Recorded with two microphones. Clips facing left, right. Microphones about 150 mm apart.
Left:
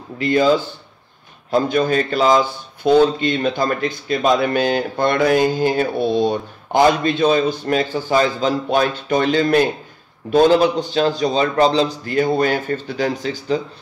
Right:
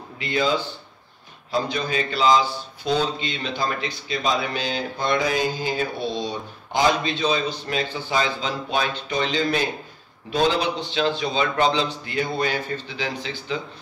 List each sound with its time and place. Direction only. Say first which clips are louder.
0.2 s a man's voice: left 8 dB; 45° left (ahead or behind)